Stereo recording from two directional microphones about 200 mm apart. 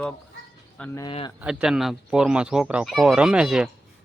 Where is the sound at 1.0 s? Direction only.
25° left (ahead or behind).